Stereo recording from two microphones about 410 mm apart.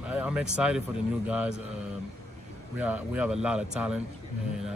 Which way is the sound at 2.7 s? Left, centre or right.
Centre.